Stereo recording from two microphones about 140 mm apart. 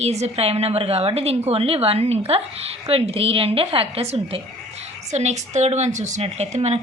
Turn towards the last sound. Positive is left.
turn(degrees=-50)  # may be behind; listen again after turning